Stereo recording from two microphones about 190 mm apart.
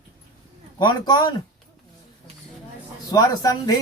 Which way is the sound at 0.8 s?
20° left (ahead or behind).